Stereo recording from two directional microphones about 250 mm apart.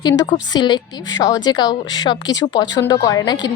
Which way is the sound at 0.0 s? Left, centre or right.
Centre.